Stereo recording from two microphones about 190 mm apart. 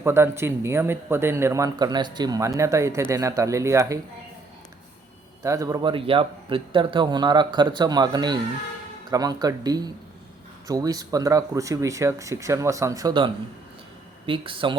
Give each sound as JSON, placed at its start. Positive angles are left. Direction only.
{"t": 0.0, "sound": "speech", "side_deg": -15}
{"t": 5.4, "sound": "a man's voice", "side_deg": -15}